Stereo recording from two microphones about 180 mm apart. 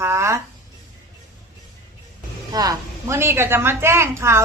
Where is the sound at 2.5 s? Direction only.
20° right (ahead or behind).